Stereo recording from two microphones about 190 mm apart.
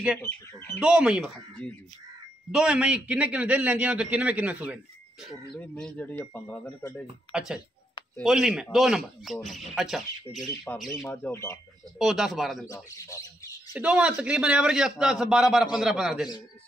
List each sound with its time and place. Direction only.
0.2 s speech: 10° left (ahead or behind)
0.7 s a man's voice: 5° right (ahead or behind)
5.5 s speech: 5° left (ahead or behind)
6.8 s speech: 20° left (ahead or behind)
7.3 s a man's voice: 5° right (ahead or behind)
11.1 s speech: 15° left (ahead or behind)
12.0 s a man's voice: centre (ahead or behind)
12.6 s speech: 15° left (ahead or behind)
13.7 s a man's voice: 5° right (ahead or behind)